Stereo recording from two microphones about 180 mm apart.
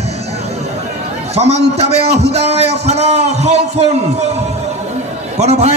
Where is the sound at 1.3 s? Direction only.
35° right (ahead or behind).